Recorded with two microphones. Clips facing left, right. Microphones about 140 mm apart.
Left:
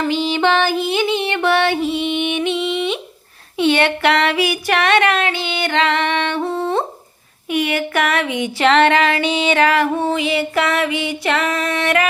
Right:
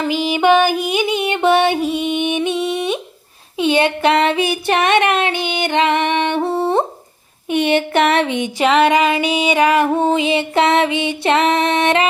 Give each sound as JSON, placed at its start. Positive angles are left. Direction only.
{"t": 0.0, "sound": "music", "side_deg": -10}
{"t": 3.6, "sound": "female singing", "side_deg": -20}
{"t": 7.5, "sound": "a sound", "side_deg": -25}